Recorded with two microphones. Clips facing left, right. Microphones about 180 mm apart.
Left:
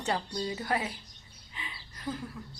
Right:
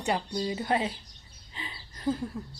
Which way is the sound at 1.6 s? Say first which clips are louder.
Right 3 dB; 30° right (ahead or behind).